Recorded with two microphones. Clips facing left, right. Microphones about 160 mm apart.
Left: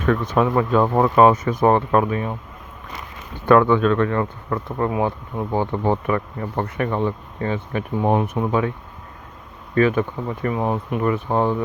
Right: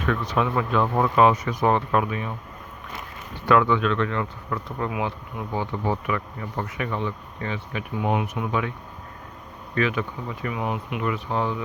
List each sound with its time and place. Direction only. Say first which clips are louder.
0.0 s speech: left 5 dB; 40° left (ahead or behind)
3.4 s speech: left 5 dB; 50° left (ahead or behind)
9.7 s speech: left 7 dB; 45° left (ahead or behind)